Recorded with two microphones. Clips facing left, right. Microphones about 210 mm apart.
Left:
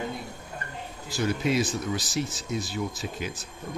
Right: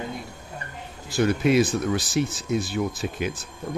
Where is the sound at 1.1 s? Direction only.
60° right (ahead or behind).